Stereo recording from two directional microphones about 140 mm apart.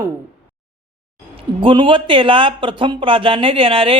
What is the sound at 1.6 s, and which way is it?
Speech, 35° right (ahead or behind).